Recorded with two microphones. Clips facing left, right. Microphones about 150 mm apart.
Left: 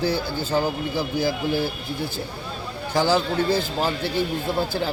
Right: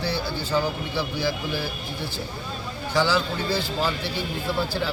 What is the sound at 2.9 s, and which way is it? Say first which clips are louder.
Speech: left 3 dB; 45° left (ahead or behind).